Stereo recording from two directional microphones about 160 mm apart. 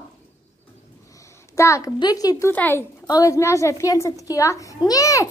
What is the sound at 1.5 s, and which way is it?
A woman's voice, 20° left (ahead or behind).